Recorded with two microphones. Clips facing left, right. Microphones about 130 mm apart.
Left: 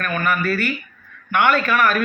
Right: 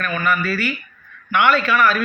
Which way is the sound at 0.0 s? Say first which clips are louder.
Even; 50° left (ahead or behind).